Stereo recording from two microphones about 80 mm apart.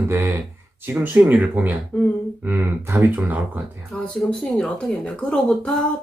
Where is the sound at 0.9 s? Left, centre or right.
Centre.